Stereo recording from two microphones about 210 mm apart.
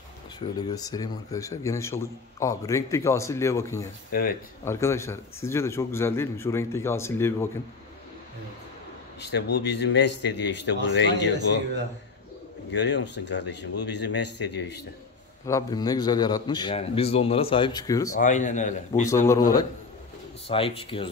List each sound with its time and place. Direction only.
0.6 s a man's voice: 20° left (ahead or behind)
4.1 s speech: 45° left (ahead or behind)
4.6 s a man's voice: 15° left (ahead or behind)
9.2 s a man's voice: 55° left (ahead or behind)
12.7 s a man's voice: 55° left (ahead or behind)
15.4 s a man's voice: 15° left (ahead or behind)
18.1 s a man's voice: 35° left (ahead or behind)
19.0 s a man's voice: 15° left (ahead or behind)
20.4 s a man's voice: 25° left (ahead or behind)